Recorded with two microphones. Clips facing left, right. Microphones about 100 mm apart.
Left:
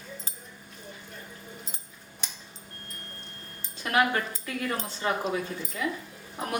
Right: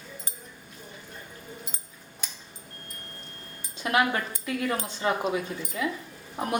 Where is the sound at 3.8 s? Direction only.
15° right (ahead or behind).